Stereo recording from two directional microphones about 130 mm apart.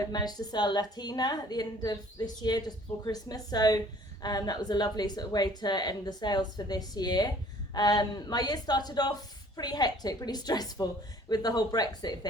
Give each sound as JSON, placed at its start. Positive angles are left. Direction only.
{"t": 0.0, "sound": "a woman's voice", "side_deg": 30}